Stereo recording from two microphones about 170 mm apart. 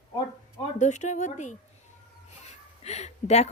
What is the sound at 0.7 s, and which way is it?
A woman's voice, 45° left (ahead or behind).